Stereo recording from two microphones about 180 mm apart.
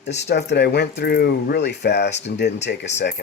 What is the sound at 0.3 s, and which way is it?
Speech, 70° left (ahead or behind).